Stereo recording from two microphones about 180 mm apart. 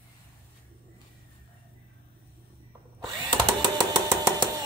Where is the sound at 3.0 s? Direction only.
25° right (ahead or behind).